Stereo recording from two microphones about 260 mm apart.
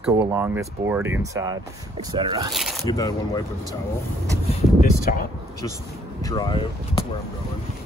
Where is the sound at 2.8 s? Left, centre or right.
Centre.